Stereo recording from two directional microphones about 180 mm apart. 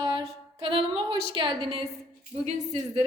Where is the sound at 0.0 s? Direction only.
20° right (ahead or behind).